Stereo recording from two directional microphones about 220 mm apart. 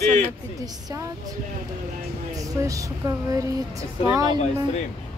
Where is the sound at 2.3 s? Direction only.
15° right (ahead or behind).